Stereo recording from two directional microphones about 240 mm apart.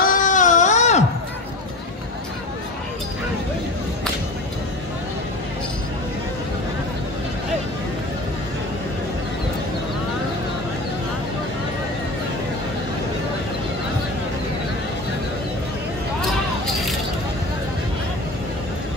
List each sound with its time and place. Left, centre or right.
0.0 s baby cry: left